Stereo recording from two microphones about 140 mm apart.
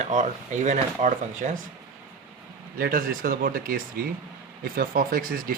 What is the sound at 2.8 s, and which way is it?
Speech, 90° right.